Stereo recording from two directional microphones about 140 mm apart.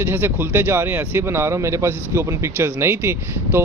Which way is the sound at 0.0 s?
15° right (ahead or behind).